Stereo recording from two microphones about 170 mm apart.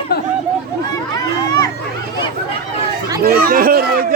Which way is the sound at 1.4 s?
20° left (ahead or behind).